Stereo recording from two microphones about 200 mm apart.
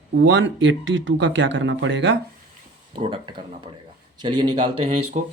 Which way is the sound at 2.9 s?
25° right (ahead or behind).